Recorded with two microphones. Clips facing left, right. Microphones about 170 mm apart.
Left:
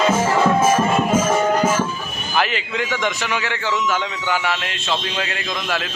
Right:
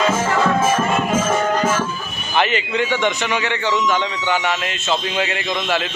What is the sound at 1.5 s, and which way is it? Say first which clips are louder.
Music: left 1 dB; 10° left (ahead or behind).